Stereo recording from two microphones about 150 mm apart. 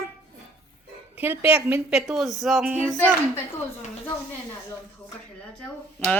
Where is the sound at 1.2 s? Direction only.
15° right (ahead or behind).